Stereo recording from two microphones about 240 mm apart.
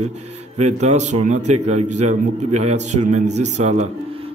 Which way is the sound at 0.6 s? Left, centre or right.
Right.